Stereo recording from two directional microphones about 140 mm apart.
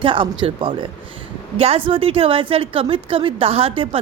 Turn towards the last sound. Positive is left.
turn(degrees=-45)  # may be behind; listen again after turning